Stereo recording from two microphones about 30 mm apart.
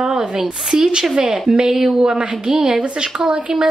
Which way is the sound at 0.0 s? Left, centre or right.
Right.